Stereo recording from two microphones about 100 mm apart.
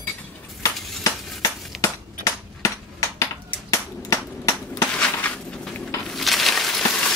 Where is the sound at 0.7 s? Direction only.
Centre (ahead or behind).